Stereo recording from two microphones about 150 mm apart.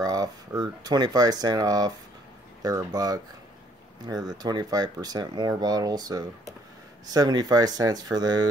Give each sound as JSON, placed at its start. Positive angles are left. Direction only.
{"t": 0.0, "sound": "speech", "side_deg": -25}
{"t": 4.3, "sound": "speech", "side_deg": -25}